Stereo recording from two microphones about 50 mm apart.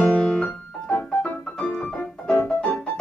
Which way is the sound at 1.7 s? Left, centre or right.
Centre.